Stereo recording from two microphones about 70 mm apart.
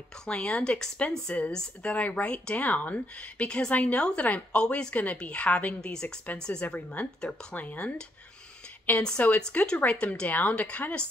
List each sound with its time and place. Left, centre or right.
0.3 s speech: centre
9.0 s speech: centre